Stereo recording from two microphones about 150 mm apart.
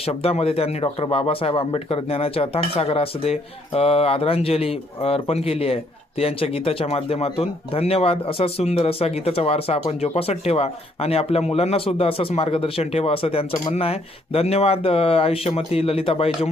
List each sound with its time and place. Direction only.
0.0 s speech: 40° left (ahead or behind)